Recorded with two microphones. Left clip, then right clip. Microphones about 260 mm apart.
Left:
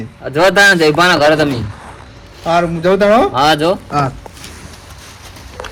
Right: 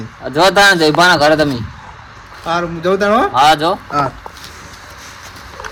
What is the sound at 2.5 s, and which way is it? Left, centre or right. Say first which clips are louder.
A man's voice: left 3 dB; left.